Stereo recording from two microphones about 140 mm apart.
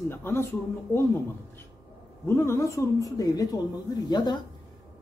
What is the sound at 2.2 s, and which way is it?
Speech, 20° left (ahead or behind).